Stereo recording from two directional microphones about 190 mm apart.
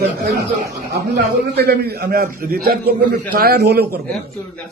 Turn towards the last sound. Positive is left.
turn(degrees=-55)  # may be behind; listen again after turning